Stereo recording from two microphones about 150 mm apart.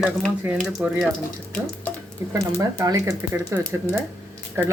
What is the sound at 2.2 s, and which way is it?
Speech, 20° right (ahead or behind).